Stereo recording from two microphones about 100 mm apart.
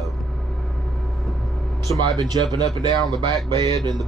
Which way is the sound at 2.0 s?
45° right (ahead or behind).